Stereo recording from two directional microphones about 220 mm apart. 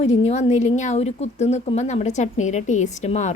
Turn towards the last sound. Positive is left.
turn(degrees=30)  # may be behind; listen again after turning